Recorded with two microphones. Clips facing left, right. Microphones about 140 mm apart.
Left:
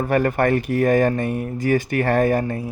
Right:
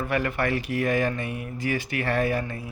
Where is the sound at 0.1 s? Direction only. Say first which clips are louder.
Left 8 dB; 45° left (ahead or behind).